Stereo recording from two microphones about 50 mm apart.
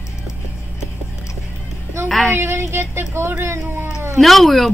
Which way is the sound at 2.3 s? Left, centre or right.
Right.